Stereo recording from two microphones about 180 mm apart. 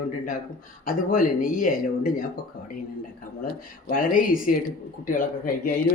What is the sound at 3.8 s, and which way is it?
Speech, 50° left (ahead or behind).